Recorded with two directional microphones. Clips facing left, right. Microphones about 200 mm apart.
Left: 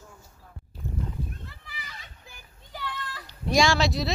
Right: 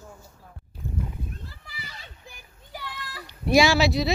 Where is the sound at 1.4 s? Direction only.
35° right (ahead or behind).